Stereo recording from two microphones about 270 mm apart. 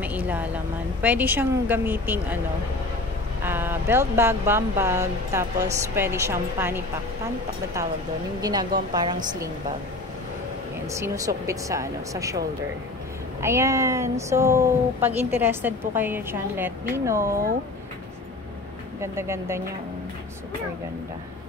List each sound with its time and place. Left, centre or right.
0.0 s speech: centre
3.4 s speech: centre
8.4 s speech: centre
10.9 s speech: centre
13.4 s speech: centre
18.9 s speech: centre